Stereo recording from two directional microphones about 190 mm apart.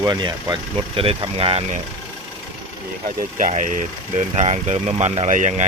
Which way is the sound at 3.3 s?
40° right (ahead or behind).